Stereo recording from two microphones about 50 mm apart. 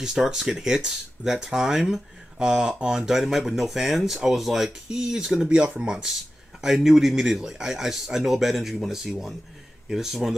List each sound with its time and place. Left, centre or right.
0.0 s speech: centre